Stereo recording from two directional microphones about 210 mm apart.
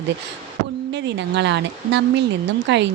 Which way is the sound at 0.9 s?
55° right (ahead or behind).